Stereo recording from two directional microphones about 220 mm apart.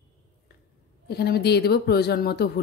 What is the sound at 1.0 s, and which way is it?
Speech, 45° left (ahead or behind).